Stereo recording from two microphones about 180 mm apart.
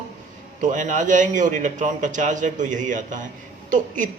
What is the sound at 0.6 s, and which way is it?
Speech, 45° right (ahead or behind).